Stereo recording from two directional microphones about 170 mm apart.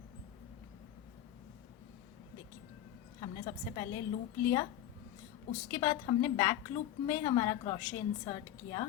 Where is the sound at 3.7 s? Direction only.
25° left (ahead or behind).